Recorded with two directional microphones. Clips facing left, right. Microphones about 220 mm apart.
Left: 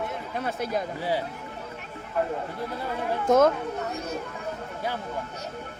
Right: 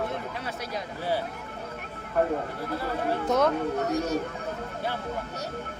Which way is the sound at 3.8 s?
35° right (ahead or behind).